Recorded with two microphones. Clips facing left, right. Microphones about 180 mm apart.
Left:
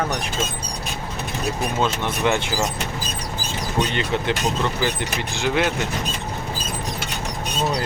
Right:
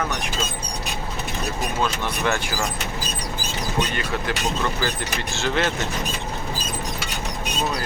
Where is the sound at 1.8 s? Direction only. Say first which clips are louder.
Left 2 dB; 20° left (ahead or behind).